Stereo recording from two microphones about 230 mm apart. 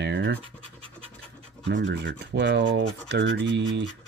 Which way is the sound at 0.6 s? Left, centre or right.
Right.